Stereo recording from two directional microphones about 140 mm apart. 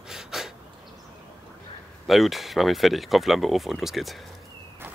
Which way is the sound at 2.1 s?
Centre (ahead or behind).